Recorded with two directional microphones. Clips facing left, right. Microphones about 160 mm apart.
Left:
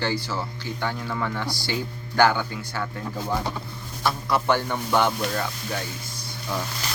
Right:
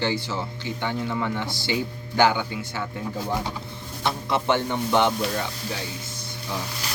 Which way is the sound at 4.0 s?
25° right (ahead or behind).